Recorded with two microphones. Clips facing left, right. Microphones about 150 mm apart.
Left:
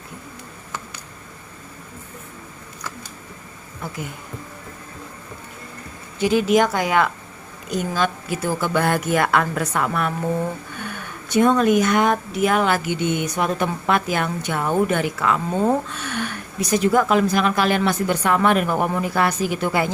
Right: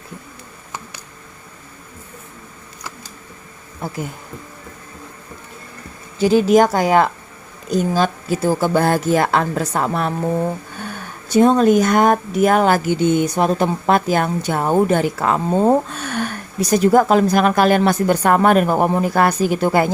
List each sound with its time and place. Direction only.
6.1 s speech: 35° right (ahead or behind)